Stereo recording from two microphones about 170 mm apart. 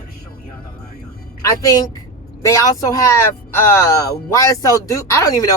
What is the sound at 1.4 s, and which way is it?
Speech, 20° left (ahead or behind).